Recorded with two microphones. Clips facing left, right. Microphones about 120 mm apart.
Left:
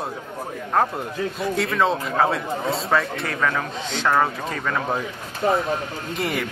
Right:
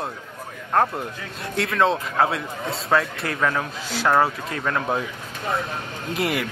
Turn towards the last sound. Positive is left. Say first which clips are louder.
# right 1 dB
turn(degrees=0)  # may be behind; listen again after turning